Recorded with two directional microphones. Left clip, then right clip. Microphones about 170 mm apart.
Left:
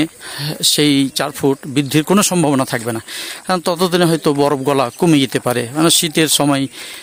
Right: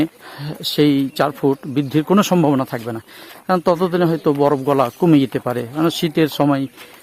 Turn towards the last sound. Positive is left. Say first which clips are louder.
# left 2 dB
turn(degrees=15)  # may be behind; listen again after turning